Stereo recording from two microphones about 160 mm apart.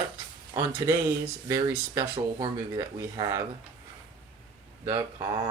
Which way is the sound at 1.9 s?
30° right (ahead or behind).